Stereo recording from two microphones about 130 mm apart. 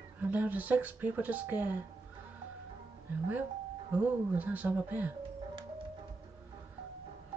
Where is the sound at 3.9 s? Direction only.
15° right (ahead or behind).